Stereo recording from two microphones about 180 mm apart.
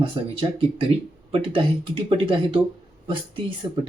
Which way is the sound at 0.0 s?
30° right (ahead or behind).